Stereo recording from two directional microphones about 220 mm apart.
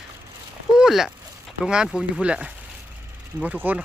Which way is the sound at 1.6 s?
5° right (ahead or behind).